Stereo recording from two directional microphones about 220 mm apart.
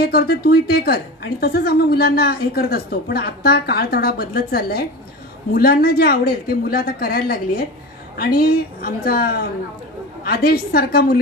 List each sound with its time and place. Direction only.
0.0 s a woman's voice: 45° left (ahead or behind)